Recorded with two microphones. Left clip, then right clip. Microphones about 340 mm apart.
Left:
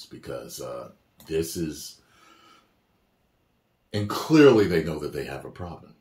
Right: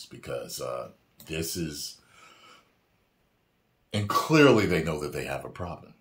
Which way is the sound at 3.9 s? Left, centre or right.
Centre.